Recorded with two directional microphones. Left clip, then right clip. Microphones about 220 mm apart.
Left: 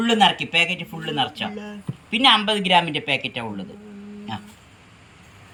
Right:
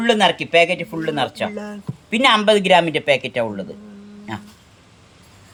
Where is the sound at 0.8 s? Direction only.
65° right (ahead or behind).